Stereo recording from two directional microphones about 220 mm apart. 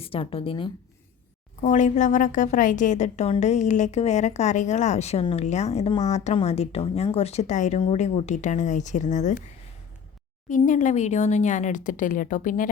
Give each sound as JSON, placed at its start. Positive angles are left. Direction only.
{"t": 0.0, "sound": "speech", "side_deg": 25}
{"t": 1.6, "sound": "a woman's voice", "side_deg": 35}
{"t": 10.5, "sound": "a woman's voice", "side_deg": 35}